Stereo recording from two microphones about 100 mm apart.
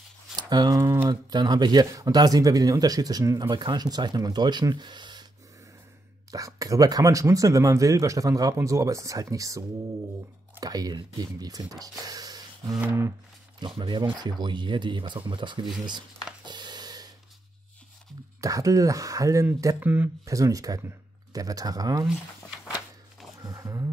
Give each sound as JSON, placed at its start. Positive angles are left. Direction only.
{"t": 0.4, "sound": "speech", "side_deg": -45}
{"t": 6.3, "sound": "speech", "side_deg": -35}
{"t": 12.8, "sound": "a sound", "side_deg": -25}
{"t": 13.7, "sound": "speech", "side_deg": -50}
{"t": 16.4, "sound": "a sound", "side_deg": -45}
{"t": 18.4, "sound": "speech", "side_deg": -35}
{"t": 19.8, "sound": "speech", "side_deg": -20}
{"t": 20.2, "sound": "speech", "side_deg": -35}
{"t": 22.0, "sound": "speech", "side_deg": -5}
{"t": 23.4, "sound": "a sound", "side_deg": -35}